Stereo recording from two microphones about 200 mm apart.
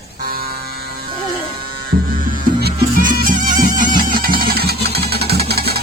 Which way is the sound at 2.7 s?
40° right (ahead or behind).